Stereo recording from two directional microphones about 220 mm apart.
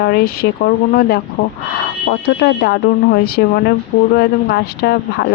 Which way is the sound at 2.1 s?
50° left (ahead or behind).